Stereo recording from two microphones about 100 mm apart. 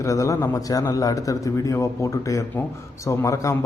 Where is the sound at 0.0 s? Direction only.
35° left (ahead or behind).